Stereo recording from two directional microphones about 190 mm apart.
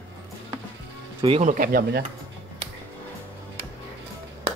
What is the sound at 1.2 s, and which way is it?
Speech, 30° right (ahead or behind).